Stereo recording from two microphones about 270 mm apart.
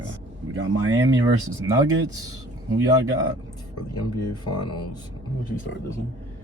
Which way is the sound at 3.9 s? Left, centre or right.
Left.